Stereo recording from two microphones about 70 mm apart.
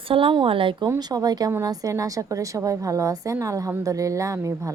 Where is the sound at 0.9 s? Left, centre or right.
Right.